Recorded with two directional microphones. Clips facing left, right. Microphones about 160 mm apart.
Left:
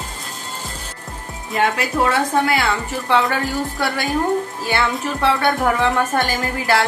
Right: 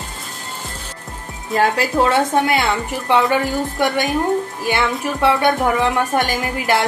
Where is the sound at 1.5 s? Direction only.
35° right (ahead or behind).